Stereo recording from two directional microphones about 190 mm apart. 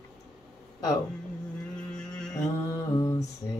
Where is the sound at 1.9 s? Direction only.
5° left (ahead or behind).